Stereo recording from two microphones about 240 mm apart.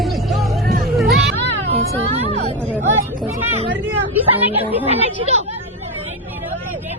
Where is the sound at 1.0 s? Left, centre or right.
Centre.